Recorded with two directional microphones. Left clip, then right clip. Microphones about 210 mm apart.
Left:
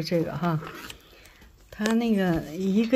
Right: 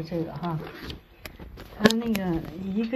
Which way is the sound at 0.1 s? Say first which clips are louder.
Left 5 dB; 60° left (ahead or behind).